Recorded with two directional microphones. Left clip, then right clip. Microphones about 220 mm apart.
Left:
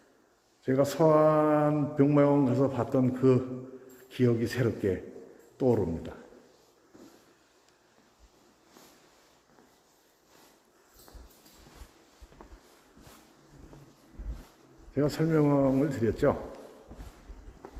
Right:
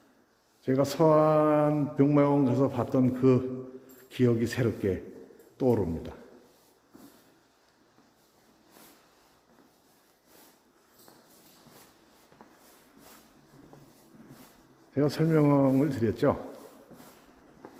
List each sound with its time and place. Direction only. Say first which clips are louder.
0.6 s speech: even; 10° right (ahead or behind)
12.4 s a sound: left 2 dB; 5° left (ahead or behind)
14.9 s speech: right 1 dB; 20° right (ahead or behind)